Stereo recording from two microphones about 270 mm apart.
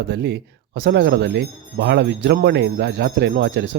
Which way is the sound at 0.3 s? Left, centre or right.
Right.